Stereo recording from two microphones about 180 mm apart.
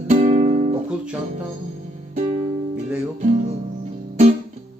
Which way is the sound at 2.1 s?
35° right (ahead or behind).